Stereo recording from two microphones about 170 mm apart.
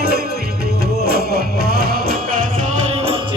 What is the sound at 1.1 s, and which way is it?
Music, 65° right (ahead or behind).